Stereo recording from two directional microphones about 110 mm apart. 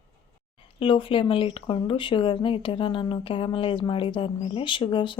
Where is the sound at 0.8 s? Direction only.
50° left (ahead or behind).